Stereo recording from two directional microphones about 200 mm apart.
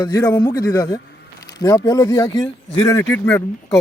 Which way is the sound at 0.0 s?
15° left (ahead or behind).